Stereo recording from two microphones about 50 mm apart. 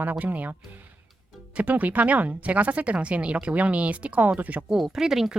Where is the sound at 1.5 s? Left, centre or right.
Right.